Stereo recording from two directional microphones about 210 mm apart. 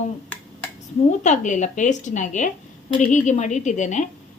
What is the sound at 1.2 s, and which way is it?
Speech, 35° left (ahead or behind).